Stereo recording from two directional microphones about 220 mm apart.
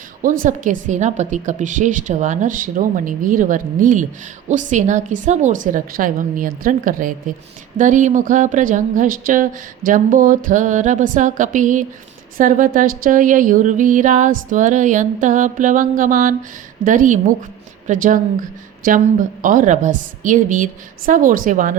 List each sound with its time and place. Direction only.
0.2 s speech: 40° right (ahead or behind)